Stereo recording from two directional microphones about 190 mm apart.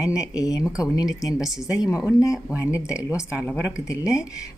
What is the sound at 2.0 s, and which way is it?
Speech, 5° right (ahead or behind).